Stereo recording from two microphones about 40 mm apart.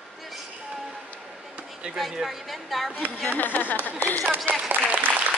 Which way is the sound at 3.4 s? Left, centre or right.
Left.